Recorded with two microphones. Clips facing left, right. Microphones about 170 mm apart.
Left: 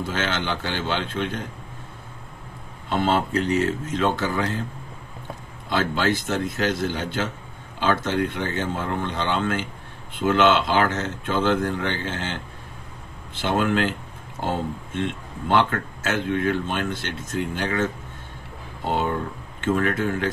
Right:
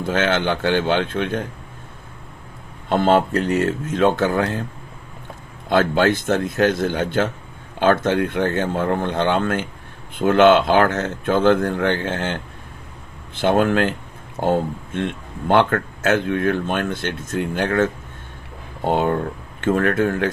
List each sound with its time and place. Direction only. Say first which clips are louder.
0.0 s speech: right 7 dB; 55° right (ahead or behind)
2.9 s speech: right 5 dB; 50° right (ahead or behind)
5.7 s speech: right 6 dB; 55° right (ahead or behind)
18.9 s speech: right 5 dB; 55° right (ahead or behind)